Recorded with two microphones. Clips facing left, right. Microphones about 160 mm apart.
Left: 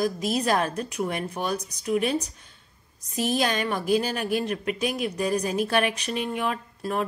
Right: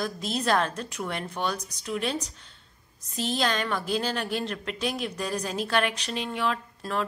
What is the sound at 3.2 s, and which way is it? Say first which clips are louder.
A woman's voice: left 3 dB; 15° left (ahead or behind).